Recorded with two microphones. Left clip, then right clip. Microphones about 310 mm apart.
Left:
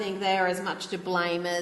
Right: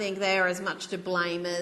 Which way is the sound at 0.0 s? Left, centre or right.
Right.